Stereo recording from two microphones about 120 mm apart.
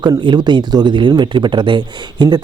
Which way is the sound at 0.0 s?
40° right (ahead or behind).